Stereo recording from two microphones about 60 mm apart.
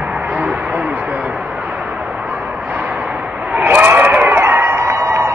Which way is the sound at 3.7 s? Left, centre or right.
Right.